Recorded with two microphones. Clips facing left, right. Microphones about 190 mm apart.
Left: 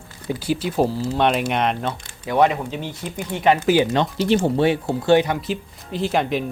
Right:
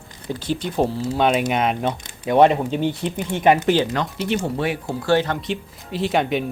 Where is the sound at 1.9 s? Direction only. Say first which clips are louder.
Right 4 dB; 20° right (ahead or behind).